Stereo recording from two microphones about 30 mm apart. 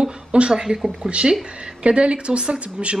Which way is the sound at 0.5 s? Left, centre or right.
Right.